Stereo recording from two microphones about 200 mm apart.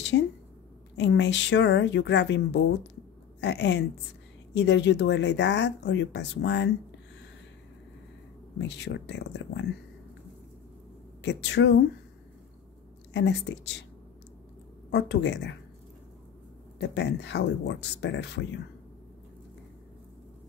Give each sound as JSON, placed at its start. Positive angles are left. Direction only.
{"t": 0.1, "sound": "a woman's voice", "side_deg": 65}
{"t": 8.5, "sound": "speech", "side_deg": 60}
{"t": 11.2, "sound": "speech", "side_deg": 60}
{"t": 13.1, "sound": "speech", "side_deg": 60}
{"t": 14.9, "sound": "speech", "side_deg": 60}
{"t": 16.9, "sound": "speech", "side_deg": 60}